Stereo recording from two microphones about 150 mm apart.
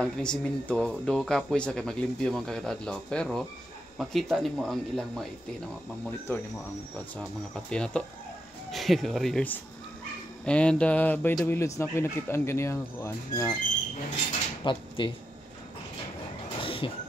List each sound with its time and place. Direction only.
0.0 s speech: 5° left (ahead or behind)
7.2 s speech: 5° left (ahead or behind)
14.6 s speech: 30° left (ahead or behind)
16.5 s vehicle: 35° left (ahead or behind)